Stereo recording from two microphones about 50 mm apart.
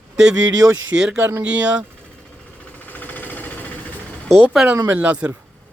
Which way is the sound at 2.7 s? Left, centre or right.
Left.